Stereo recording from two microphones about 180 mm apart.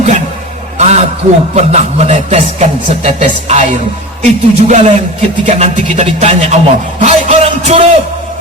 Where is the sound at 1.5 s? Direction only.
40° right (ahead or behind).